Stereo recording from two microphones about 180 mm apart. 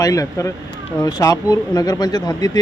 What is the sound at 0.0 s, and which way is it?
Speech, 20° left (ahead or behind).